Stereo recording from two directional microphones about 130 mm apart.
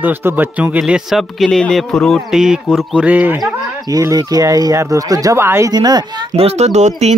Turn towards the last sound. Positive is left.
turn(degrees=-60)  # may be behind; listen again after turning